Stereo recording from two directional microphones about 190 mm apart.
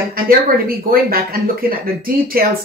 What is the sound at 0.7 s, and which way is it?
Speech, 50° right (ahead or behind).